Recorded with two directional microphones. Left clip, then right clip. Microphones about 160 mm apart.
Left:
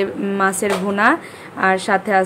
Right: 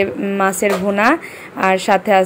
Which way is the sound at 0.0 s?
10° right (ahead or behind).